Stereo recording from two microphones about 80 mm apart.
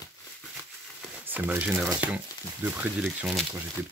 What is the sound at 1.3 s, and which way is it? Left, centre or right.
Speech, right.